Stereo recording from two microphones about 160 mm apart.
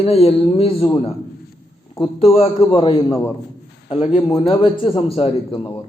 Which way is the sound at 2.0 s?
40° left (ahead or behind).